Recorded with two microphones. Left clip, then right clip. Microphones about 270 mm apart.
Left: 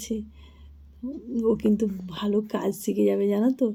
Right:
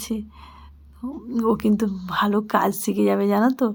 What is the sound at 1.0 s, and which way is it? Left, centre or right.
Speech, right.